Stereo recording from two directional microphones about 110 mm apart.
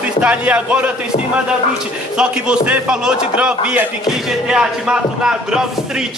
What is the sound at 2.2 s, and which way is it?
A man's voice, 10° right (ahead or behind).